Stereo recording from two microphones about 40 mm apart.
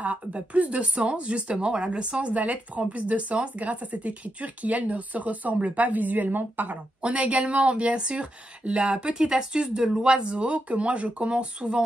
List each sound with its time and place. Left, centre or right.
0.0 s speech: right
7.0 s a woman's voice: right